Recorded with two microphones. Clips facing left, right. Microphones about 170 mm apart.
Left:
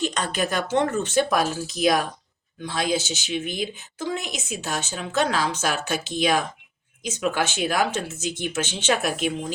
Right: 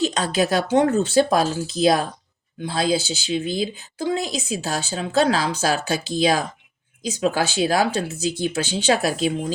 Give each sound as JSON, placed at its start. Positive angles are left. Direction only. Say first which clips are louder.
{"t": 0.0, "sound": "speech", "louder": "right 5 dB", "side_deg": -35}